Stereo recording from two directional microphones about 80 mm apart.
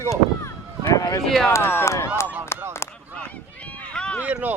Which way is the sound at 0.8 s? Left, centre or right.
Left.